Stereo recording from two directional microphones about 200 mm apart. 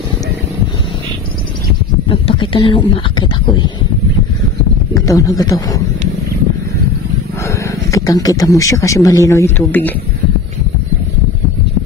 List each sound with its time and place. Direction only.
2.0 s speech: 25° left (ahead or behind)
4.9 s a man's voice: 15° left (ahead or behind)
7.4 s speech: 15° left (ahead or behind)